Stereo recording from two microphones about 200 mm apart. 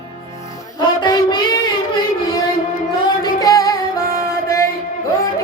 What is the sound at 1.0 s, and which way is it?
Child singing, 20° left (ahead or behind).